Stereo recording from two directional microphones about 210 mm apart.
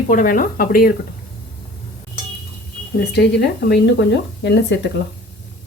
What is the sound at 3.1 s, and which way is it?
Speech, 55° left (ahead or behind).